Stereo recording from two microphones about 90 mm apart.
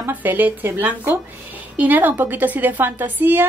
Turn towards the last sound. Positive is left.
turn(degrees=-20)  # may be behind; listen again after turning